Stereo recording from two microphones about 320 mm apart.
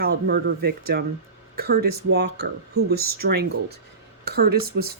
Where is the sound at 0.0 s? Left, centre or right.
Right.